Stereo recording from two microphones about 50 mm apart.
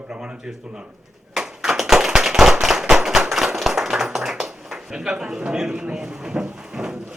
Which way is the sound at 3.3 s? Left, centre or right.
Centre.